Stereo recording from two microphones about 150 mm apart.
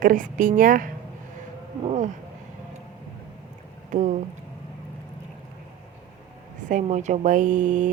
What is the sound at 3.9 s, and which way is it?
Speech, 55° right (ahead or behind).